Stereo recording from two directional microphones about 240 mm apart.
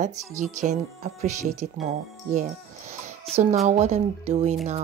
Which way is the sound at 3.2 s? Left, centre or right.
Right.